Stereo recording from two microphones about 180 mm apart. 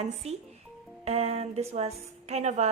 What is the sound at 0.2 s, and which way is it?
A woman's voice, 35° right (ahead or behind).